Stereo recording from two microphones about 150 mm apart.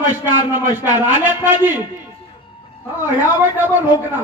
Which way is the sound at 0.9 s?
10° right (ahead or behind).